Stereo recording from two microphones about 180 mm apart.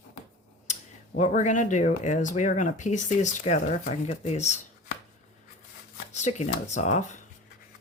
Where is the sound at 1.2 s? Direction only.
40° left (ahead or behind).